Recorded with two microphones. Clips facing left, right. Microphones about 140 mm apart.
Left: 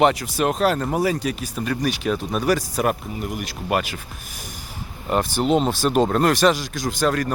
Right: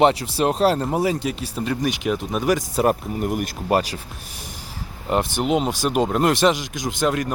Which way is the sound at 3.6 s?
30° right (ahead or behind).